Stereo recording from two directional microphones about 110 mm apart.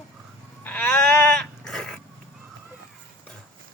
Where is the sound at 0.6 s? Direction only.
15° left (ahead or behind).